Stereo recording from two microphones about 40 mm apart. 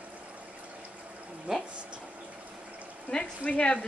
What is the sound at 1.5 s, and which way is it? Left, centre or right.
Speech, right.